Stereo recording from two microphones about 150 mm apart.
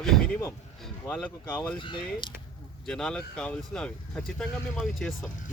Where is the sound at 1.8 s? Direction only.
35° left (ahead or behind).